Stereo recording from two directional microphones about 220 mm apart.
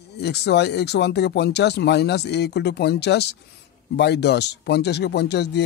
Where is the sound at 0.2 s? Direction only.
50° left (ahead or behind).